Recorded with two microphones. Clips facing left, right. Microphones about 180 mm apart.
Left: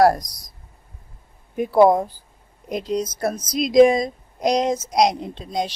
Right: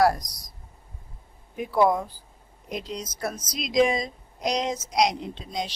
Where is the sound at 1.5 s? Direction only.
40° left (ahead or behind).